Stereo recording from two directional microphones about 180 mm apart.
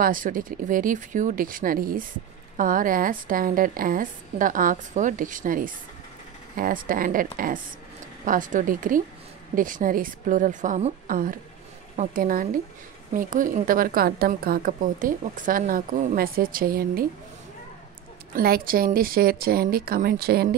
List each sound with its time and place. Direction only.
0.0 s a woman's voice: 50° right (ahead or behind)
18.3 s speech: 55° right (ahead or behind)